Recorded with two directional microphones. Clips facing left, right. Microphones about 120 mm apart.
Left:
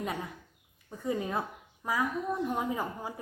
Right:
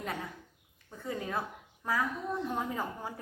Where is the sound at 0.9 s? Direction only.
15° left (ahead or behind).